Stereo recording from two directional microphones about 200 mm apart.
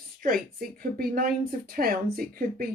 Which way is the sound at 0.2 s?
45° right (ahead or behind).